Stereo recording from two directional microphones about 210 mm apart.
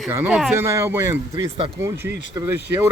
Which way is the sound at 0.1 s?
5° right (ahead or behind).